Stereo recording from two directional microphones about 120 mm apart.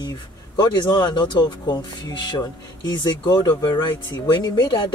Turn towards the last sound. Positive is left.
turn(degrees=40)  # may be behind; listen again after turning